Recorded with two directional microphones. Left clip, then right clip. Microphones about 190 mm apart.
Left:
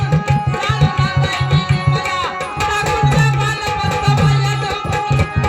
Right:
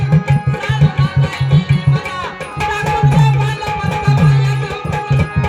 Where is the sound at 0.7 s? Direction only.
45° left (ahead or behind).